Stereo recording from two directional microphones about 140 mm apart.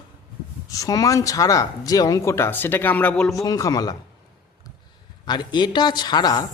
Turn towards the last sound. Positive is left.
turn(degrees=30)  # may be behind; listen again after turning